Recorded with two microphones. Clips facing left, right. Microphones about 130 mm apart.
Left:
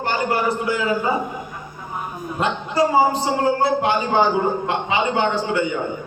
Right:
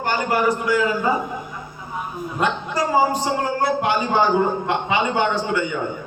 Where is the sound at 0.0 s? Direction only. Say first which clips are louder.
Right 1 dB; 30° left (ahead or behind).